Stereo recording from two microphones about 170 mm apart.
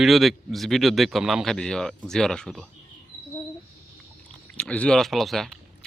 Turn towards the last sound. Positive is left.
turn(degrees=0)  # may be behind; listen again after turning